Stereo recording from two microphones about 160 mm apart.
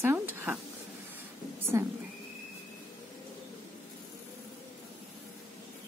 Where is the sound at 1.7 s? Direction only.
15° right (ahead or behind).